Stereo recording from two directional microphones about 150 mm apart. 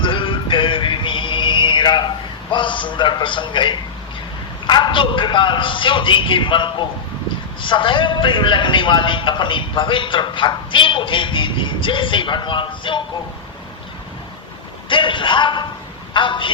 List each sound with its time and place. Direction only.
0.0 s music: 35° left (ahead or behind)
4.6 s a man's voice: 30° left (ahead or behind)
14.8 s a man's voice: 35° left (ahead or behind)